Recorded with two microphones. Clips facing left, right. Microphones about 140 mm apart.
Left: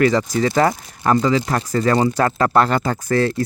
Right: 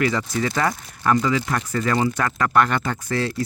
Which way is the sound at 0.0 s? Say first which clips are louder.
Left 6 dB; 40° left (ahead or behind).